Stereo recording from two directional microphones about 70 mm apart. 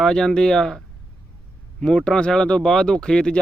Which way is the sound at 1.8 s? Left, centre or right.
Centre.